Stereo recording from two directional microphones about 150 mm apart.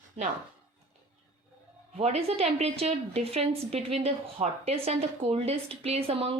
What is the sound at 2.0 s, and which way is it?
A woman's voice, 45° right (ahead or behind).